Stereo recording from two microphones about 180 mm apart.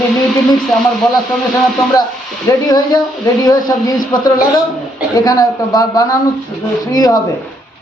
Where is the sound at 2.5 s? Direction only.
20° left (ahead or behind).